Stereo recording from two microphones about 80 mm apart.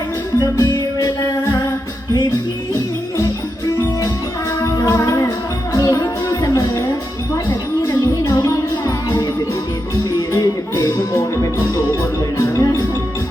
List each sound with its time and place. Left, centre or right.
0.3 s music: left
4.6 s music: left
10.3 s music: left